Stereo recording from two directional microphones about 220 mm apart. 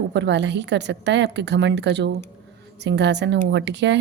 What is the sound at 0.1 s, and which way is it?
Speech, 50° right (ahead or behind).